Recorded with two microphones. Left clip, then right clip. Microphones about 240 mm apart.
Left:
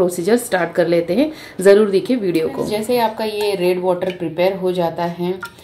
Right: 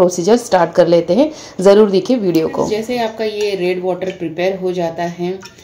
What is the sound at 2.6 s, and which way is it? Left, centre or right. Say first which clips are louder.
Speech: even; centre.